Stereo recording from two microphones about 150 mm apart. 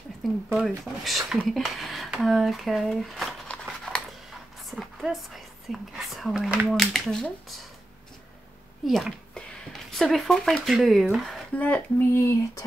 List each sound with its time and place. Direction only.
0.2 s speech: centre (ahead or behind)
8.8 s speech: centre (ahead or behind)
11.5 s speech: 10° left (ahead or behind)